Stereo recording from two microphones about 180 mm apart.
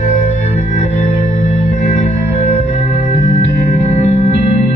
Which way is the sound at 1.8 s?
40° left (ahead or behind).